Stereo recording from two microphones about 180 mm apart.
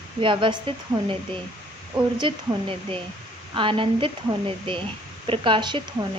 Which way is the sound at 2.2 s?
30° right (ahead or behind).